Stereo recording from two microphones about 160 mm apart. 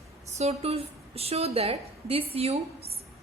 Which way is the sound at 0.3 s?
40° right (ahead or behind).